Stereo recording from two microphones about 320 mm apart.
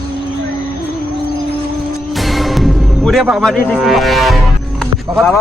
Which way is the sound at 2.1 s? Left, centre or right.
Centre.